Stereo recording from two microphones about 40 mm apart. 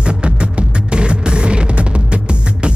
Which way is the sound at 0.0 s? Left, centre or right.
Right.